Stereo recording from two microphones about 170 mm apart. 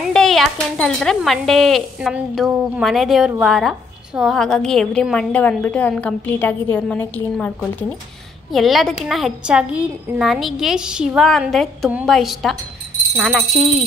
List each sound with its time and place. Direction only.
0.1 s speech: 5° left (ahead or behind)